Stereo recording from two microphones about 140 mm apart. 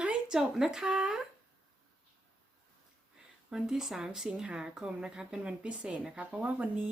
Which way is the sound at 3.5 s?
5° right (ahead or behind).